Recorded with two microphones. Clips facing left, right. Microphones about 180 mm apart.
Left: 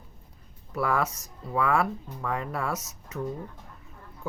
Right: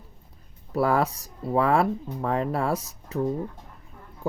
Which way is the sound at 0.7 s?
35° right (ahead or behind).